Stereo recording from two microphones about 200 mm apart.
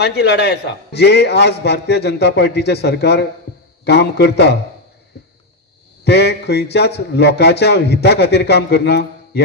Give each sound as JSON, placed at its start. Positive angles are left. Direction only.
{"t": 0.0, "sound": "a man's voice", "side_deg": 55}
{"t": 6.0, "sound": "a man's voice", "side_deg": 55}